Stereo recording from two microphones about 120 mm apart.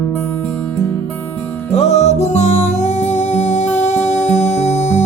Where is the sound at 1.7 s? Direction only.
65° left (ahead or behind).